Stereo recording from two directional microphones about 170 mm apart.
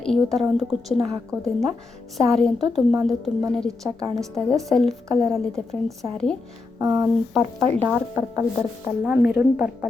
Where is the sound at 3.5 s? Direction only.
5° left (ahead or behind).